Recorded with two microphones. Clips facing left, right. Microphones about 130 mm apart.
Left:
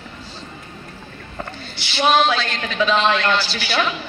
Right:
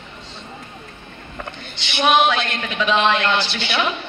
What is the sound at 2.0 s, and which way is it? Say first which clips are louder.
A woman's voice: even; 20° right (ahead or behind).